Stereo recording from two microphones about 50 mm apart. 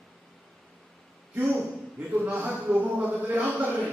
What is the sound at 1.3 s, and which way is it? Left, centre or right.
A man's voice, right.